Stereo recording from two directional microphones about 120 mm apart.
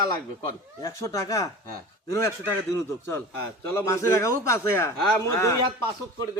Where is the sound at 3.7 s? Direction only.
20° left (ahead or behind).